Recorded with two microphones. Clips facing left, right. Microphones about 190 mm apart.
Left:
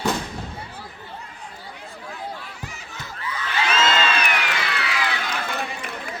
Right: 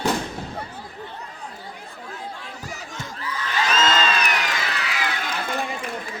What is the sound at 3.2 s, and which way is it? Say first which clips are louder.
Crowd: even; 40° right (ahead or behind).